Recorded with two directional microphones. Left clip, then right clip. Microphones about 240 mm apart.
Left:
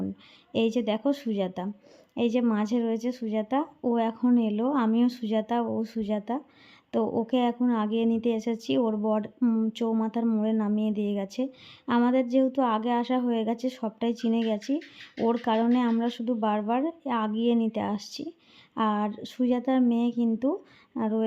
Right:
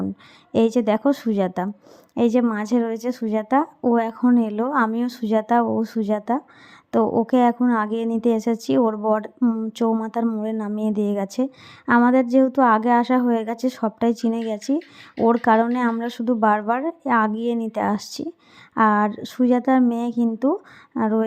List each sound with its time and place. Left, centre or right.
0.5 s a woman's voice: right